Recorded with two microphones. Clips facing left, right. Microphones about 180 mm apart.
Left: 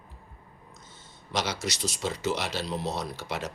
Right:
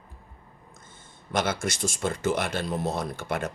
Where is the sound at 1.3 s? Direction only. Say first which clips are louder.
Right 4 dB; 50° right (ahead or behind).